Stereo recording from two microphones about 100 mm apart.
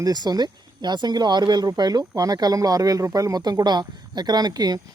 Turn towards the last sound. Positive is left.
turn(degrees=-45)  # may be behind; listen again after turning